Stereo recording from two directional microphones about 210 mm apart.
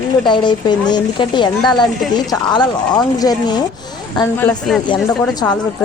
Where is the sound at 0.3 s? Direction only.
20° left (ahead or behind).